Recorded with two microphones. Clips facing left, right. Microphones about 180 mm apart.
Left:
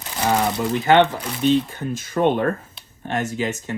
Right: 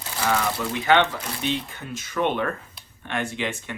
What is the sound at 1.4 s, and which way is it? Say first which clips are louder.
Speech: left 11 dB; 50° left (ahead or behind).